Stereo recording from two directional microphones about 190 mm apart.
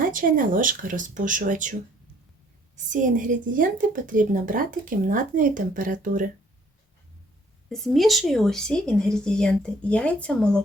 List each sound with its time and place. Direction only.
0.0 s speech: 45° right (ahead or behind)
2.7 s speech: 40° right (ahead or behind)
7.7 s speech: centre (ahead or behind)